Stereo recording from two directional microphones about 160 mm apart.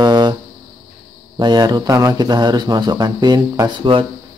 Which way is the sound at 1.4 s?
25° right (ahead or behind).